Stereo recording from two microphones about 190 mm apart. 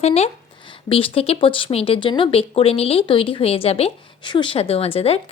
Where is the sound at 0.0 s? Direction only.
35° left (ahead or behind).